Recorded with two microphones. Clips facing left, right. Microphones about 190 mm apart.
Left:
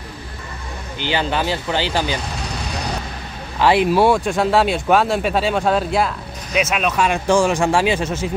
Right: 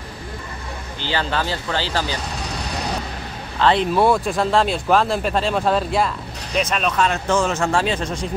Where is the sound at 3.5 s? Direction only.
10° left (ahead or behind).